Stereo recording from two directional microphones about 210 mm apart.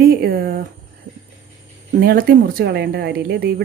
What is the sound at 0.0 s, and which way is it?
Speech, 45° right (ahead or behind).